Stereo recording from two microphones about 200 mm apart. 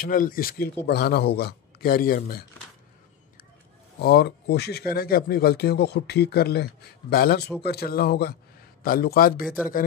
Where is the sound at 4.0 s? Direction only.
50° left (ahead or behind).